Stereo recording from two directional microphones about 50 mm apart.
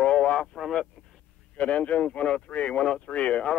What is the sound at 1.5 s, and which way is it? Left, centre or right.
Speech, left.